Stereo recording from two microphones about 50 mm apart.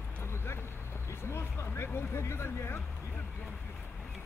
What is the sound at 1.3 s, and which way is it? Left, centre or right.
Speech, left.